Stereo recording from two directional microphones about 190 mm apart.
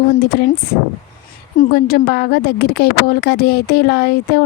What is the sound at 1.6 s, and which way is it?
Speech, 50° left (ahead or behind).